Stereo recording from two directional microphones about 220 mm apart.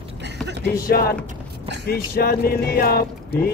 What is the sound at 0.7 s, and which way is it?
A man's voice, 45° left (ahead or behind).